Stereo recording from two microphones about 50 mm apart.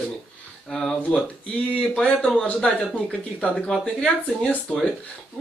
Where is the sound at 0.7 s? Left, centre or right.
Centre.